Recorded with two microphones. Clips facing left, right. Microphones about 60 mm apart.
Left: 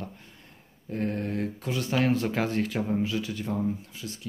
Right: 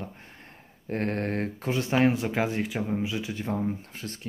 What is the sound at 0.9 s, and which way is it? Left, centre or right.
Speech, right.